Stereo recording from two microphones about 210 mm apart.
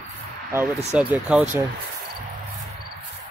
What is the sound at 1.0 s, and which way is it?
Speech, 5° right (ahead or behind).